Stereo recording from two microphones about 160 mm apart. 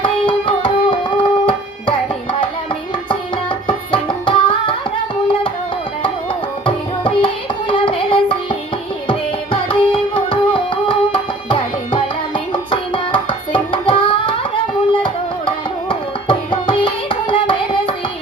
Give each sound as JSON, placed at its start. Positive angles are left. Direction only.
{"t": 0.0, "sound": "music", "side_deg": 35}
{"t": 3.1, "sound": "music", "side_deg": 35}
{"t": 6.7, "sound": "music", "side_deg": 35}
{"t": 9.0, "sound": "tabla", "side_deg": 35}